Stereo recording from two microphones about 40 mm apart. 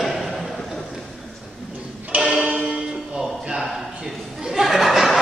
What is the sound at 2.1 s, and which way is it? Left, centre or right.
Music, right.